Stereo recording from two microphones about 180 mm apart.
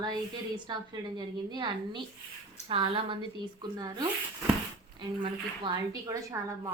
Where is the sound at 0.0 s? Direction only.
20° right (ahead or behind).